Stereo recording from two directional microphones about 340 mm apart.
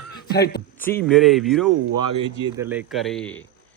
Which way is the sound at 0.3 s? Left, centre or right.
Left.